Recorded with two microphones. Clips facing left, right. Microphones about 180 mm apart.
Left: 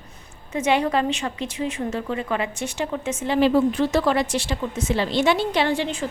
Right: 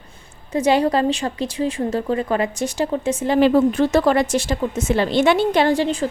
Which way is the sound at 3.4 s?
50° right (ahead or behind).